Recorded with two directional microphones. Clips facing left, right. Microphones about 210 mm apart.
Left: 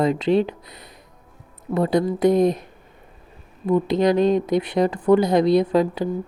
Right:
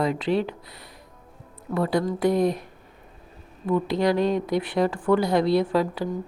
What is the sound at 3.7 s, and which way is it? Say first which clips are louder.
A woman's voice: left 4 dB; 20° left (ahead or behind).